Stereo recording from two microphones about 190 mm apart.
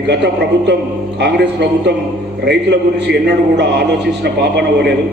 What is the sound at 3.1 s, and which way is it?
A man's voice, 60° right (ahead or behind).